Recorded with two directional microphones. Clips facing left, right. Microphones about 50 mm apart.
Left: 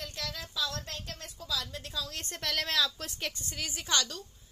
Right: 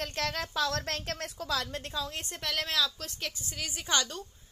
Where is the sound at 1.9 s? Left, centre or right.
Right.